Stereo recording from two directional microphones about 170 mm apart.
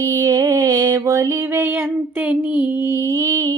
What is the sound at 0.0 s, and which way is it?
Music, 20° right (ahead or behind).